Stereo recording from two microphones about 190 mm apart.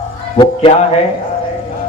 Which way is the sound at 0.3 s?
25° left (ahead or behind).